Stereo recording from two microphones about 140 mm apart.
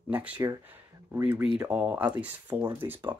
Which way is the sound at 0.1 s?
10° right (ahead or behind).